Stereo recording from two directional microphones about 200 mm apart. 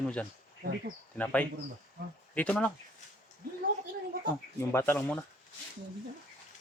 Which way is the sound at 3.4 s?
50° right (ahead or behind).